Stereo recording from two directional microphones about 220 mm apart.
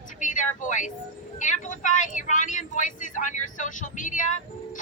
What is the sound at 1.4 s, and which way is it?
Speech, 35° left (ahead or behind).